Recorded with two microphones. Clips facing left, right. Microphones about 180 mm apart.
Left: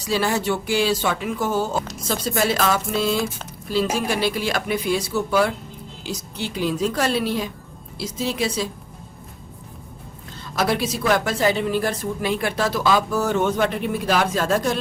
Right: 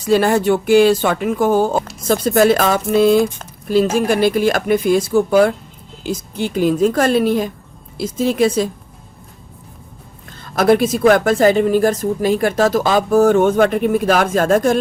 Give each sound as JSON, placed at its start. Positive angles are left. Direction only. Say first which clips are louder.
{"t": 0.0, "sound": "a woman's voice", "louder": "right 8 dB", "side_deg": -55}
{"t": 3.2, "sound": "speech", "louder": "right 9 dB", "side_deg": 5}
{"t": 3.7, "sound": "a woman's voice", "louder": "right 7 dB", "side_deg": -50}
{"t": 10.4, "sound": "a woman's voice", "louder": "right 9 dB", "side_deg": -50}